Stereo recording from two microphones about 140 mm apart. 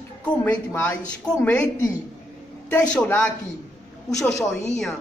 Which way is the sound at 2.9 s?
10° left (ahead or behind).